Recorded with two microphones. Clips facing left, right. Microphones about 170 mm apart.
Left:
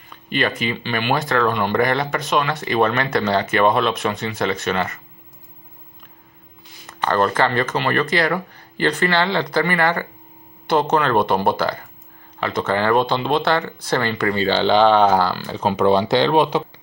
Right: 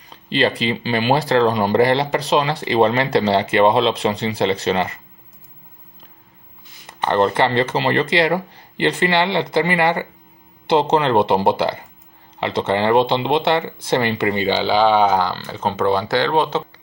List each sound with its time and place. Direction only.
0.1 s speech: 30° right (ahead or behind)
6.9 s speech: 25° right (ahead or behind)
15.2 s speech: 10° left (ahead or behind)